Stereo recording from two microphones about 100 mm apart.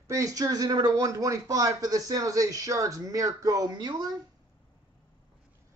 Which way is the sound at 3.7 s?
45° right (ahead or behind).